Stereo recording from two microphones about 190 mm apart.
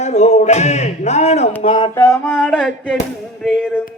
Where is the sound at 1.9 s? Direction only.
15° left (ahead or behind).